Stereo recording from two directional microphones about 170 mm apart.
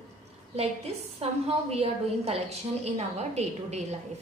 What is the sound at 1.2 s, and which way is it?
A woman's voice, 35° right (ahead or behind).